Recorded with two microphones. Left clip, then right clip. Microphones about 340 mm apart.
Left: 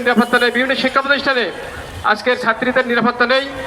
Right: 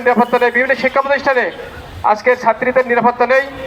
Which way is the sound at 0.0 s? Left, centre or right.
Centre.